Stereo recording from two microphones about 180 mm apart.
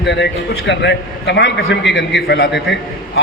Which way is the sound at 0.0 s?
75° left (ahead or behind).